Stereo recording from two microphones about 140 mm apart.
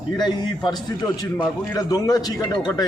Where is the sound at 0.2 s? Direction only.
30° left (ahead or behind).